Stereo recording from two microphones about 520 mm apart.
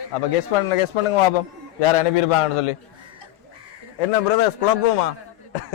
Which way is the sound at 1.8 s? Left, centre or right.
Left.